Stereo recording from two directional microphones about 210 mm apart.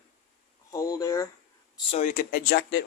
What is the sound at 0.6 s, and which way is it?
Speech, 15° left (ahead or behind).